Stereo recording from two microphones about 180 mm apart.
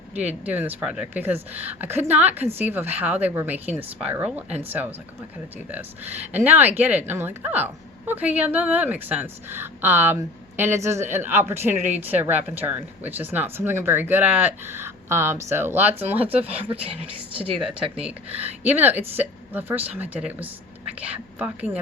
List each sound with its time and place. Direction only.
0.1 s a woman's voice: 10° right (ahead or behind)
16.2 s a woman's voice: 35° right (ahead or behind)
18.3 s a woman's voice: 10° right (ahead or behind)